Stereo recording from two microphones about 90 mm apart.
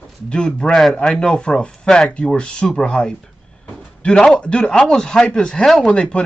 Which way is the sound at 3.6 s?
10° left (ahead or behind).